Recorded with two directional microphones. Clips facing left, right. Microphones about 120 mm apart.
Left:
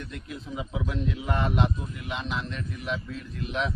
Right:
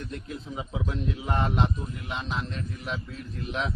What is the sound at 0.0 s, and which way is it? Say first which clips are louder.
A man's voice: right 1 dB; 35° right (ahead or behind).